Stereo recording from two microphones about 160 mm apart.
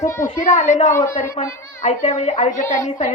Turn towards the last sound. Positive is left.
turn(degrees=50)  # may be behind; listen again after turning